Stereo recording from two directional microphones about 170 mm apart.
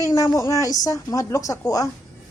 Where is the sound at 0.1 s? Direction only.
15° left (ahead or behind).